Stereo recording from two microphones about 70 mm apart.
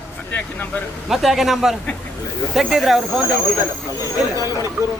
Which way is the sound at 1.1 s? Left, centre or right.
Centre.